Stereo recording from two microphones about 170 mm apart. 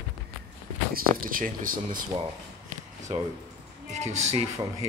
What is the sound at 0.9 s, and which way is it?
Speech, 55° right (ahead or behind).